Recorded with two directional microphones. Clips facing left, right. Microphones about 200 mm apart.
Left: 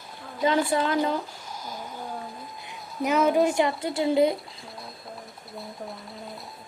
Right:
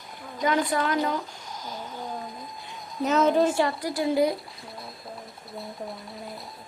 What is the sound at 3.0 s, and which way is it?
Speech, 10° left (ahead or behind).